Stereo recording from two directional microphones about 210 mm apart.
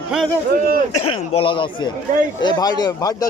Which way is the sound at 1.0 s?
25° left (ahead or behind).